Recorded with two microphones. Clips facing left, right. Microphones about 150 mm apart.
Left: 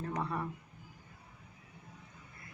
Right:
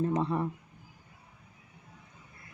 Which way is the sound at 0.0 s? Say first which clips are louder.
Right 8 dB; 20° right (ahead or behind).